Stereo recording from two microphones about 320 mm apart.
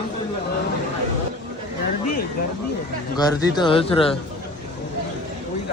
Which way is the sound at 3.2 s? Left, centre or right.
Centre.